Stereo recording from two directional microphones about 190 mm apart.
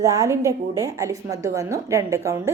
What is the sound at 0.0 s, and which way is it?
A woman's voice, 15° right (ahead or behind).